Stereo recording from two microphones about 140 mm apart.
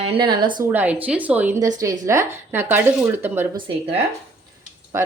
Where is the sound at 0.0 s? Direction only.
40° right (ahead or behind).